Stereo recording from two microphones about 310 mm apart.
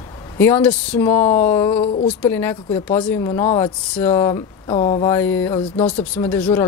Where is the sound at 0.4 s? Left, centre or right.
Centre.